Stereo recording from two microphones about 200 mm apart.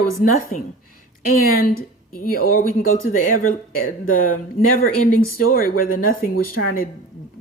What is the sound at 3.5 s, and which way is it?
Speech, 90° left.